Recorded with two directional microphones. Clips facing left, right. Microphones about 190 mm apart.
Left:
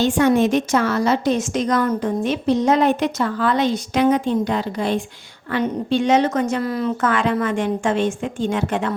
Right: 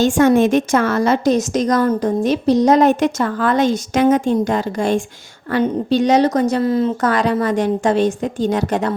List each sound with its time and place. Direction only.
0.0 s a woman's voice: 45° right (ahead or behind)